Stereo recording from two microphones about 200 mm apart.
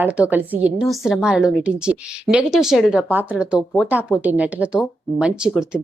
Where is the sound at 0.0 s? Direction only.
10° right (ahead or behind).